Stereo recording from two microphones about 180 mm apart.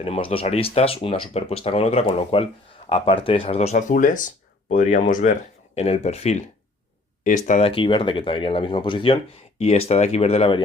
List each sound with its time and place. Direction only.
0.0 s speech: 30° left (ahead or behind); by 5.3 s 45° left (ahead or behind)
5.7 s speech: 35° left (ahead or behind)
7.6 s speech: 30° left (ahead or behind)